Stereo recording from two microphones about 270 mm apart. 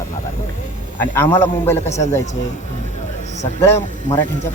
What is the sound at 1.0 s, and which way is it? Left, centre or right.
Speech, centre.